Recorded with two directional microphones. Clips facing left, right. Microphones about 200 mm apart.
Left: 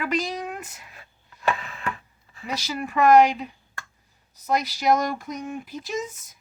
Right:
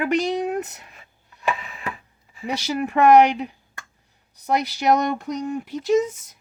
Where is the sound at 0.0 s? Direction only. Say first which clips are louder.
Right 6 dB; 70° right (ahead or behind).